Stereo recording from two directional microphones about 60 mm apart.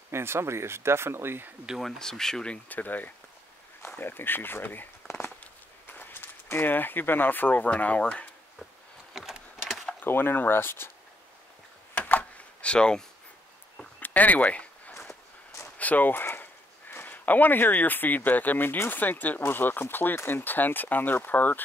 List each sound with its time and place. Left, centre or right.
0.1 s speech: right
1.8 s speech: centre
2.5 s speech: left
5.4 s walk: left
9.1 s a sound: centre
10.0 s speech: left
11.9 s a sound: left
12.7 s speech: centre
13.9 s a sound: left
15.6 s speech: left